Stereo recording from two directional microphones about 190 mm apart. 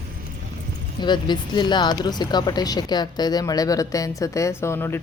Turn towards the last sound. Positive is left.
turn(degrees=15)  # may be behind; listen again after turning